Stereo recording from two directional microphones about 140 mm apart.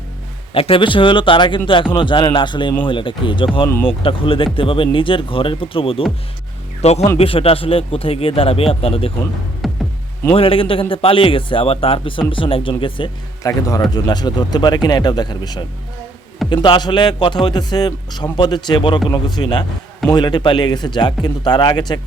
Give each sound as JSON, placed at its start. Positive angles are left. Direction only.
{"t": 0.5, "sound": "a man's voice", "side_deg": 40}
{"t": 9.6, "sound": "music", "side_deg": 0}
{"t": 10.3, "sound": "a man's voice", "side_deg": 40}
{"t": 13.4, "sound": "a man's voice", "side_deg": 25}